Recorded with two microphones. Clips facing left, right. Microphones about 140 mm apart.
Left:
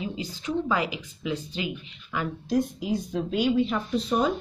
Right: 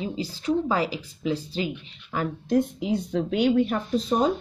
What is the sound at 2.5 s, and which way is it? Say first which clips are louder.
A woman's voice: right 2 dB; 60° right (ahead or behind).